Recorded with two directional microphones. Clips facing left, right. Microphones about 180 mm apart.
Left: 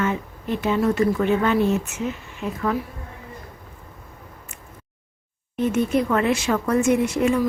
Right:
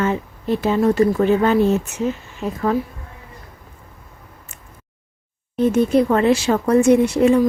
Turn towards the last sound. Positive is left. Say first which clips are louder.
# right 6 dB
turn(degrees=-35)  # may be behind; listen again after turning